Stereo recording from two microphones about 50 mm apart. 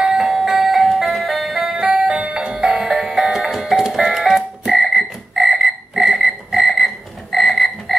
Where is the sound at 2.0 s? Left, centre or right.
Right.